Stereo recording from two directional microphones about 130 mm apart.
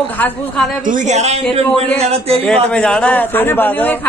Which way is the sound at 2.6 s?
5° left (ahead or behind).